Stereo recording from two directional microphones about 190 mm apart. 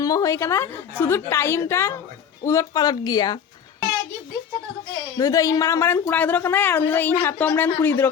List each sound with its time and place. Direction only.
0.0 s a woman's voice: 20° left (ahead or behind)
5.1 s a woman's voice: 20° left (ahead or behind)